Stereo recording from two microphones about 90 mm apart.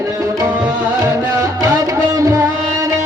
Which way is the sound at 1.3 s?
40° right (ahead or behind).